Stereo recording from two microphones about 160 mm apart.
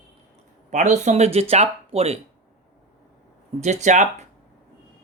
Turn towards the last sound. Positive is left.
turn(degrees=-50)  # may be behind; listen again after turning